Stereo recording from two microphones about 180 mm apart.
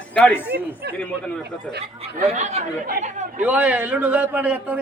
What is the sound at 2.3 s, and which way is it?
Speech, 35° right (ahead or behind).